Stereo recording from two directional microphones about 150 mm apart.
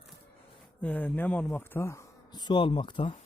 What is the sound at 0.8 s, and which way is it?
Speech, 10° left (ahead or behind).